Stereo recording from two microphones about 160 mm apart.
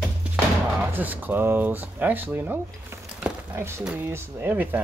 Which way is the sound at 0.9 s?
10° right (ahead or behind).